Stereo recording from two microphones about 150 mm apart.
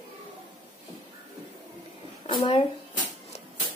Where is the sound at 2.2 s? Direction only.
35° left (ahead or behind).